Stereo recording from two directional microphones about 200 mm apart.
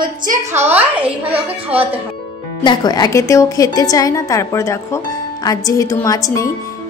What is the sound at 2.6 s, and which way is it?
A woman's voice, 20° left (ahead or behind).